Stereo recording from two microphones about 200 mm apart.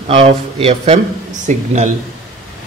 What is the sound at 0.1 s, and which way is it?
Speech, 30° right (ahead or behind).